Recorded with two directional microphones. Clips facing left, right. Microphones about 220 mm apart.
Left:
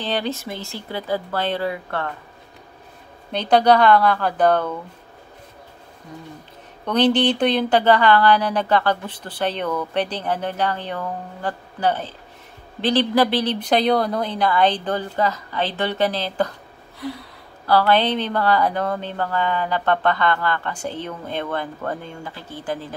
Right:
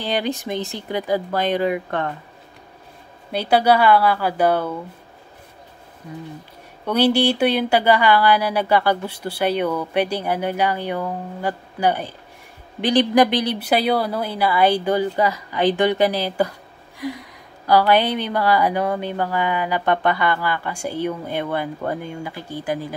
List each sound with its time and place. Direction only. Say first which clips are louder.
0.0 s a woman's voice: right 1 dB; 15° right (ahead or behind)
3.3 s a woman's voice: left 1 dB; 10° right (ahead or behind)
6.9 s a woman's voice: even; 10° right (ahead or behind)